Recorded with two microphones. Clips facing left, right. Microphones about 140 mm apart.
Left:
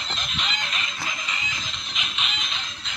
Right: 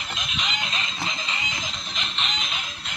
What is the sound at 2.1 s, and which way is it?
Music, 5° left (ahead or behind).